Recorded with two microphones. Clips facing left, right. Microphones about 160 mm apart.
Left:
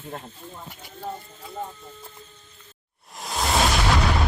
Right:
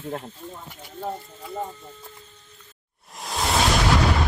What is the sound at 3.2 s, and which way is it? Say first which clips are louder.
Music: even; centre (ahead or behind).